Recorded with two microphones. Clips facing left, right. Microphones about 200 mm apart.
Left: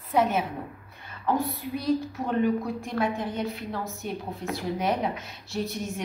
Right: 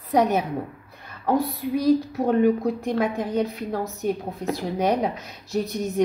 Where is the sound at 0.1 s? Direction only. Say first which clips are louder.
Right 4 dB; 40° right (ahead or behind).